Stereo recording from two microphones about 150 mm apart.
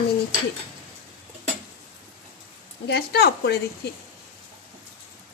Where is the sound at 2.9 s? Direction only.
90° left.